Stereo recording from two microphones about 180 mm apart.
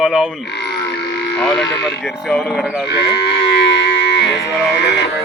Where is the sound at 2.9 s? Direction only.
70° left (ahead or behind).